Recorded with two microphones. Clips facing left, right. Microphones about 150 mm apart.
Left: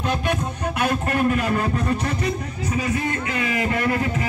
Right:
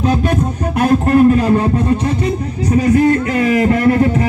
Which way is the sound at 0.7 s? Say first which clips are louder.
Right 12 dB; 35° right (ahead or behind).